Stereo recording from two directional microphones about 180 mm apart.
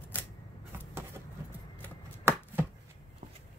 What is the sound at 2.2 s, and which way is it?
Chopping, 15° right (ahead or behind).